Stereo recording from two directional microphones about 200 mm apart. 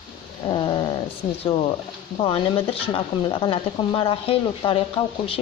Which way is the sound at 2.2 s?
25° left (ahead or behind).